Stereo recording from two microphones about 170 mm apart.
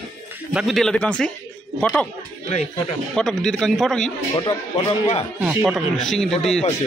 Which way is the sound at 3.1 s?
5° left (ahead or behind).